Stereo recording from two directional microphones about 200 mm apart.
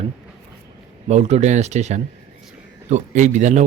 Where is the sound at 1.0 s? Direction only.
35° right (ahead or behind).